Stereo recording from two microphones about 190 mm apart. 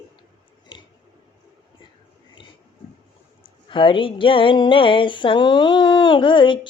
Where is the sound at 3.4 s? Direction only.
25° left (ahead or behind).